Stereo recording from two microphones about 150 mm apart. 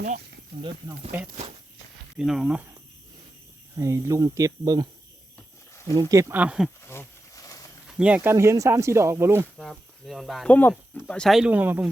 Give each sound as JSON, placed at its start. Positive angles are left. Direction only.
{"t": 2.1, "sound": "speech", "side_deg": -5}
{"t": 3.8, "sound": "speech", "side_deg": -20}
{"t": 5.9, "sound": "speech", "side_deg": -25}
{"t": 6.8, "sound": "a sound", "side_deg": 15}
{"t": 7.9, "sound": "speech", "side_deg": -5}
{"t": 9.6, "sound": "speech", "side_deg": 0}